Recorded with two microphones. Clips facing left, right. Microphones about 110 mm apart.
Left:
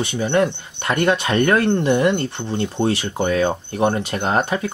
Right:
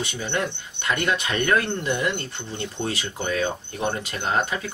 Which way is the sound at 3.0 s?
50° left (ahead or behind).